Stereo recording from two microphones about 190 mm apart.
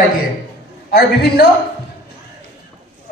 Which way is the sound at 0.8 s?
55° left (ahead or behind).